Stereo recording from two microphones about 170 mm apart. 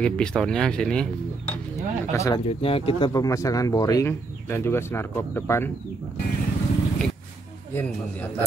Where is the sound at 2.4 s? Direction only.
35° left (ahead or behind); by 5.7 s 15° left (ahead or behind).